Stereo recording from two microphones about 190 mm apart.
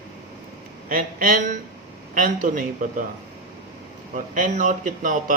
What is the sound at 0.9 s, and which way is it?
Speech, 45° right (ahead or behind).